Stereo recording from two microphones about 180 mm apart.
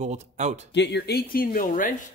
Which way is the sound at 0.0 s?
40° right (ahead or behind).